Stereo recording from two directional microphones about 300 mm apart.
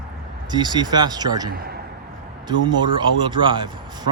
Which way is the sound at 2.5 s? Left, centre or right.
Centre.